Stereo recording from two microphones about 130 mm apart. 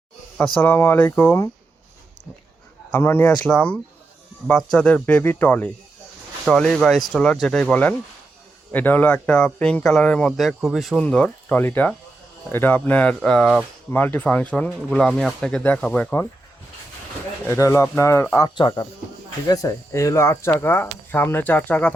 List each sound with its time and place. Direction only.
0.6 s speech: 15° left (ahead or behind)
2.9 s speech: 15° left (ahead or behind)
13.9 s speech: 15° left (ahead or behind)
17.5 s speech: 20° left (ahead or behind)
18.3 s speech: 35° left (ahead or behind)
19.5 s speech: 25° left (ahead or behind)